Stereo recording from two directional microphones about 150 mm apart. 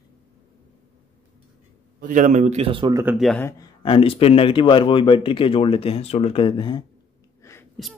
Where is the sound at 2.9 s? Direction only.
20° right (ahead or behind).